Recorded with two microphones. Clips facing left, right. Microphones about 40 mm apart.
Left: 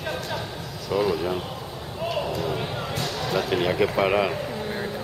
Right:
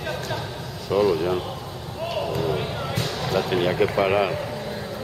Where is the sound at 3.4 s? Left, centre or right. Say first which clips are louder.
Right 1 dB; centre.